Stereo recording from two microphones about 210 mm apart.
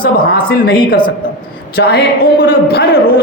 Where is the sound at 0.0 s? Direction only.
45° left (ahead or behind).